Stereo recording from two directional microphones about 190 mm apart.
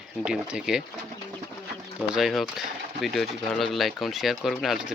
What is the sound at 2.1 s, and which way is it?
Speech, centre (ahead or behind).